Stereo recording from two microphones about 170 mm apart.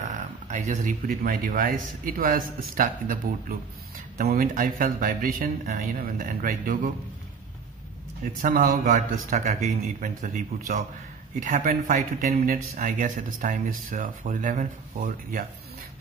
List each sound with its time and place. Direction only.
0.0 s speech: 45° right (ahead or behind)
8.2 s speech: 60° right (ahead or behind)